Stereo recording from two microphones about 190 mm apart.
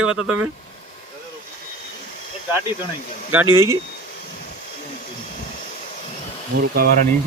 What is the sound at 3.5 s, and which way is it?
Speech, 15° right (ahead or behind).